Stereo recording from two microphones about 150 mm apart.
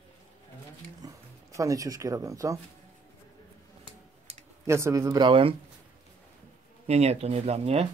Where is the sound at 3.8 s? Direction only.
45° right (ahead or behind).